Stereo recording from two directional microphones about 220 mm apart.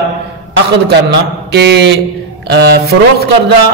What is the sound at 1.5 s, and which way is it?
A man's voice, 50° right (ahead or behind).